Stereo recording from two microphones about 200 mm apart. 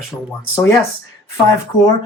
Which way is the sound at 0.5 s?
15° left (ahead or behind).